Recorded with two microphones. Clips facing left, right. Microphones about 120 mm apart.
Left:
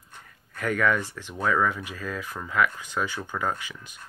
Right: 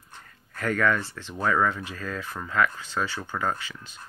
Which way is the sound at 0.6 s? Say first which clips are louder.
Even; 10° left (ahead or behind).